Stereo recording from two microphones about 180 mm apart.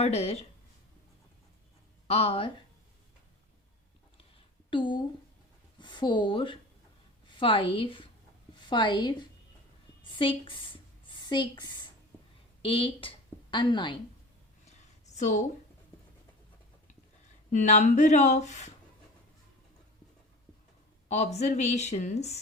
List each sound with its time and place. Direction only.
0.0 s speech: 35° left (ahead or behind)
2.0 s speech: 35° left (ahead or behind)
4.7 s a woman's voice: 25° left (ahead or behind)
14.7 s a sound: 40° left (ahead or behind)
17.5 s speech: 45° left (ahead or behind)
21.1 s speech: 40° left (ahead or behind)